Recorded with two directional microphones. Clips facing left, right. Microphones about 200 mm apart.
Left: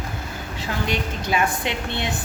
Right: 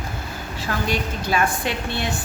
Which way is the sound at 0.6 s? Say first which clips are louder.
Right 1 dB; 20° left (ahead or behind).